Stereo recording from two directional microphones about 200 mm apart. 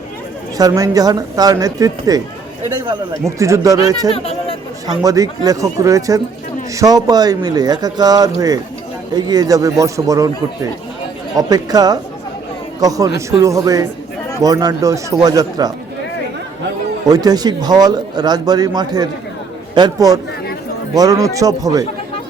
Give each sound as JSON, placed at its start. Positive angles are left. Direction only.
{"t": 0.5, "sound": "speech", "side_deg": -20}
{"t": 4.1, "sound": "speech", "side_deg": 30}
{"t": 5.0, "sound": "speech", "side_deg": -20}
{"t": 17.1, "sound": "speech", "side_deg": -20}